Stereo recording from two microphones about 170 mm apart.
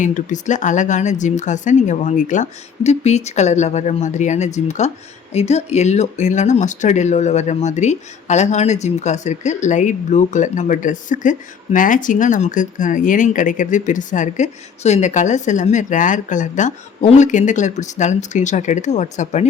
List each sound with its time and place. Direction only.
0.0 s speech: 45° left (ahead or behind)